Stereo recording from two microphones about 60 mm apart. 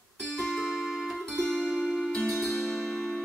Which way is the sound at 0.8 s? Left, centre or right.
Centre.